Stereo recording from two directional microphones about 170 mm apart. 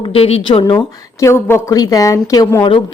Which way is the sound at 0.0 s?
35° left (ahead or behind).